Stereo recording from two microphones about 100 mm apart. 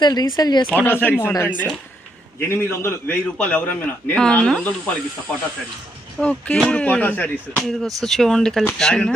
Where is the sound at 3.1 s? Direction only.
15° left (ahead or behind).